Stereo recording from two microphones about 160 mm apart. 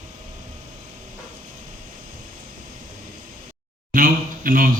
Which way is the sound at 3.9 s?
60° right (ahead or behind).